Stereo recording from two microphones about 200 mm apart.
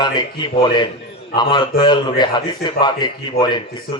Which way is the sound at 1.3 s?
20° left (ahead or behind).